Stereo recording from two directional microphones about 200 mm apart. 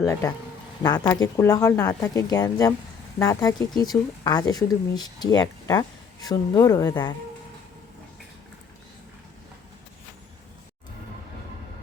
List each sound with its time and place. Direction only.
0.0 s speech: 15° left (ahead or behind)